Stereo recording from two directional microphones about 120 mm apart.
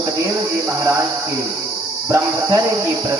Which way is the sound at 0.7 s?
25° right (ahead or behind).